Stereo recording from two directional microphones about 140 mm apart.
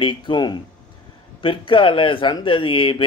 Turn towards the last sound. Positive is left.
turn(degrees=35)  # may be behind; listen again after turning